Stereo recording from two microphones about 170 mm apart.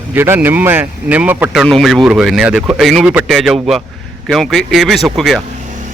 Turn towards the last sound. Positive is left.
turn(degrees=0)  # may be behind; listen again after turning